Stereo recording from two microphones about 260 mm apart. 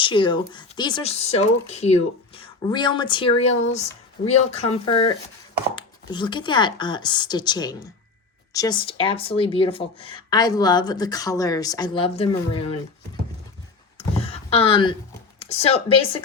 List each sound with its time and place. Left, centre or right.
0.0 s speech: centre
14.2 s a sound: left
15.4 s speech: left